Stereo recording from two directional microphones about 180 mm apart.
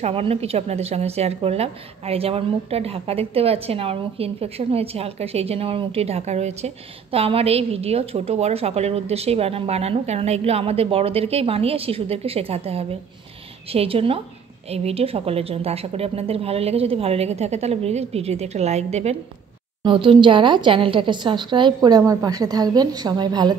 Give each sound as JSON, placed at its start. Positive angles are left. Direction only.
{"t": 0.0, "sound": "a woman's voice", "side_deg": -35}